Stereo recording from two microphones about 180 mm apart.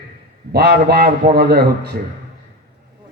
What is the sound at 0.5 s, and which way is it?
A man's voice, 65° right (ahead or behind).